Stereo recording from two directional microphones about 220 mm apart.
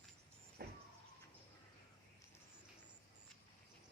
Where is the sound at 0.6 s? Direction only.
45° right (ahead or behind).